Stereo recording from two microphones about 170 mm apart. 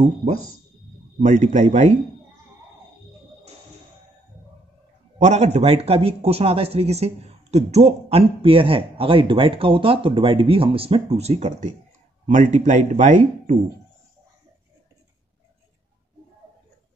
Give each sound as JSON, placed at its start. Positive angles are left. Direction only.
{"t": 0.0, "sound": "speech", "side_deg": -40}
{"t": 5.2, "sound": "speech", "side_deg": -40}